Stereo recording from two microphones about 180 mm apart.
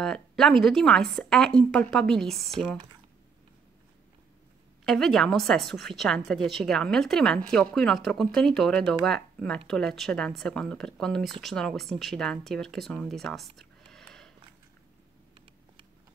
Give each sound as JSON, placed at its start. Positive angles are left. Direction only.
{"t": 0.0, "sound": "speech", "side_deg": 0}
{"t": 4.8, "sound": "speech", "side_deg": 0}
{"t": 13.6, "sound": "a sound", "side_deg": 5}